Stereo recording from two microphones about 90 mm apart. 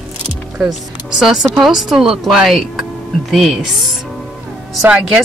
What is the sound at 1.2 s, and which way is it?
Speech, 5° right (ahead or behind).